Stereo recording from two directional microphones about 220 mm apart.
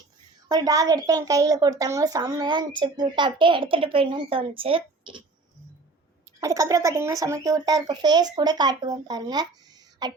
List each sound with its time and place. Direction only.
0.4 s a woman's voice: 15° right (ahead or behind)
6.4 s a child's voice: 15° right (ahead or behind)